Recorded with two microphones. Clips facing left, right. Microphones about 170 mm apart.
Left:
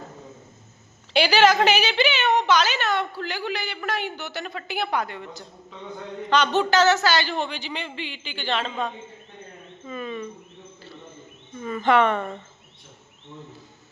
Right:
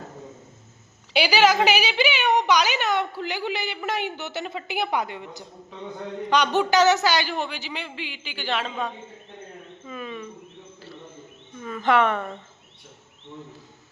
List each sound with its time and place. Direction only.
1.1 s a woman's voice: 10° right (ahead or behind)
9.8 s insect: centre (ahead or behind)
11.6 s speech: centre (ahead or behind)